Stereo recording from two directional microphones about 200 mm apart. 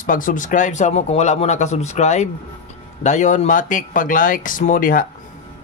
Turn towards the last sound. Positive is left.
turn(degrees=45)  # may be behind; listen again after turning